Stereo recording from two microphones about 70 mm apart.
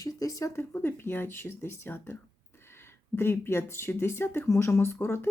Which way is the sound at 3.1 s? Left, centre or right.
Left.